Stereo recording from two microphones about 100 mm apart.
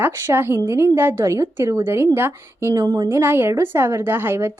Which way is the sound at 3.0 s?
25° right (ahead or behind).